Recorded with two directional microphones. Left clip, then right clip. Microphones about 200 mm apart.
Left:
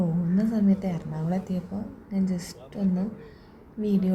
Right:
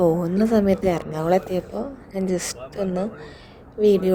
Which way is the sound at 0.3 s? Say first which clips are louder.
Right 8 dB; 40° right (ahead or behind).